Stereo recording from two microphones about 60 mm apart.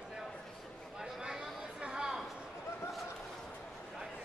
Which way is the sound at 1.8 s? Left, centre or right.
Centre.